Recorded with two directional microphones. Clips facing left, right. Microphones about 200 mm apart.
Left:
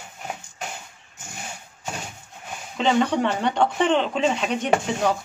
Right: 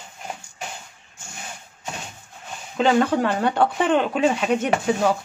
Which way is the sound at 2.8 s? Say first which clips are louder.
Right 2 dB; 5° right (ahead or behind).